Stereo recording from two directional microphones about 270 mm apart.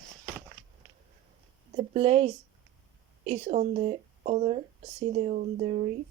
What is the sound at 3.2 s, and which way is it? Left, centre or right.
Speech, right.